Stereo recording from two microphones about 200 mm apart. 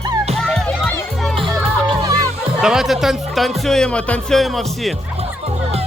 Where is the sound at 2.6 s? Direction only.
Centre (ahead or behind).